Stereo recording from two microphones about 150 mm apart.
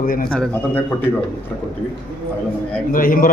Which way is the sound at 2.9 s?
65° left (ahead or behind).